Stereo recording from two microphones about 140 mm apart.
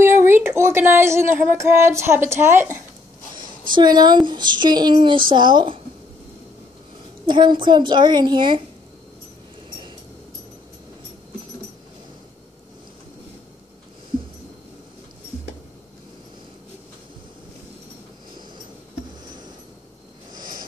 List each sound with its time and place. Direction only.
0.0 s speech: 15° right (ahead or behind)
3.3 s speech: 35° right (ahead or behind)
7.2 s speech: 35° right (ahead or behind)